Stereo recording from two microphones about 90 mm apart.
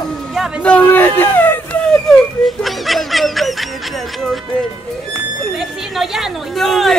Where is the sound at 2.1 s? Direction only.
Centre (ahead or behind).